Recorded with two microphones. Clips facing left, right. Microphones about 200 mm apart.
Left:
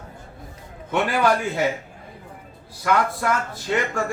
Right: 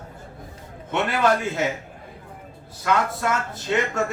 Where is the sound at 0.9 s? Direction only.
20° right (ahead or behind).